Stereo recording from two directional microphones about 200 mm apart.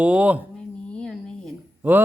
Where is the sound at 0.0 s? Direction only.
5° right (ahead or behind).